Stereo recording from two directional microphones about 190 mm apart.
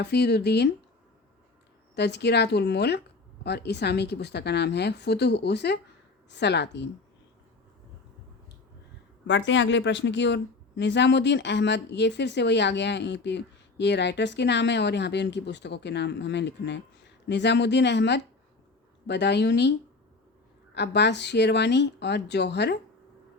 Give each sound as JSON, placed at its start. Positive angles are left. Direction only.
{"t": 0.0, "sound": "a woman's voice", "side_deg": 60}
{"t": 2.0, "sound": "a woman's voice", "side_deg": 60}
{"t": 9.2, "sound": "a woman's voice", "side_deg": 70}
{"t": 20.7, "sound": "a woman's voice", "side_deg": 65}